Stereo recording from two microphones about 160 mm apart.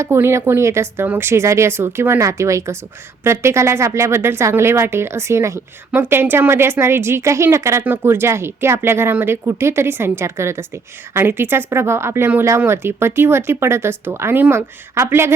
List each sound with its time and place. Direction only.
0.0 s speech: 15° right (ahead or behind)